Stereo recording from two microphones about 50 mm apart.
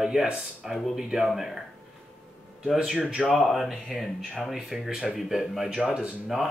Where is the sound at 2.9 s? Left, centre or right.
Right.